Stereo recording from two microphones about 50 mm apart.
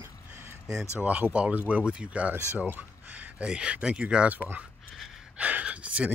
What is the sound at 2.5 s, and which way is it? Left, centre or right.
Speech, right.